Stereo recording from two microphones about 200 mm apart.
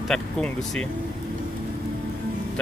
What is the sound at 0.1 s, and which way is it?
Speech, 5° left (ahead or behind).